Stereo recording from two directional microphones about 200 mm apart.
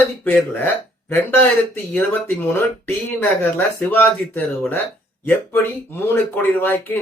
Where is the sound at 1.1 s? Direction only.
10° left (ahead or behind).